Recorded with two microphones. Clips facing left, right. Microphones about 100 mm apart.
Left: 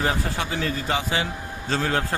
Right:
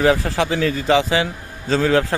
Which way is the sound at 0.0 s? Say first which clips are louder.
Right 8 dB; 90° right.